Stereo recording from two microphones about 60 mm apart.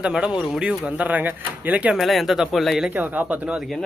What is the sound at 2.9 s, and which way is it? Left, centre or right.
Speech, right.